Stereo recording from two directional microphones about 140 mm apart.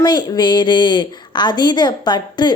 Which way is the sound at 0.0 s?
30° left (ahead or behind).